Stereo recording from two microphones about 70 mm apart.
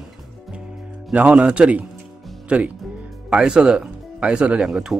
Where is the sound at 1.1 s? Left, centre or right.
Right.